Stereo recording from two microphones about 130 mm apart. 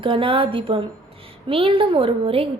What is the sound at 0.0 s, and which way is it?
A woman's voice, 45° right (ahead or behind).